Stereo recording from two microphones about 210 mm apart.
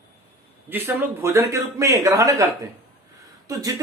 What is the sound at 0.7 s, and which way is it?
Speech, 10° right (ahead or behind).